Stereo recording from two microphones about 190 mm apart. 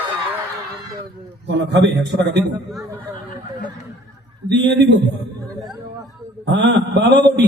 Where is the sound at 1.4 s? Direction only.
65° right (ahead or behind).